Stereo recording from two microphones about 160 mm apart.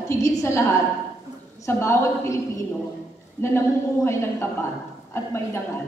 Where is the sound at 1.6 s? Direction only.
15° left (ahead or behind).